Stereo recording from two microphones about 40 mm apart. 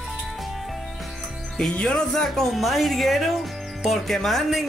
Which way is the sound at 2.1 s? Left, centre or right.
Centre.